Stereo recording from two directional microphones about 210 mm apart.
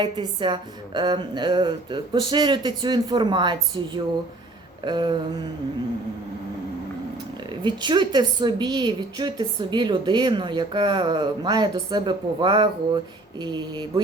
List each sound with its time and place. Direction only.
0.0 s a woman's voice: 20° right (ahead or behind)
7.5 s a woman's voice: 20° right (ahead or behind)